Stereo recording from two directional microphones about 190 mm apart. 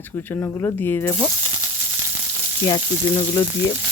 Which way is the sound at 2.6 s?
20° left (ahead or behind).